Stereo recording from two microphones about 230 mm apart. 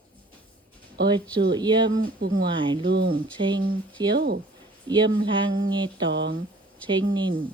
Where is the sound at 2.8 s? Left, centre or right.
Right.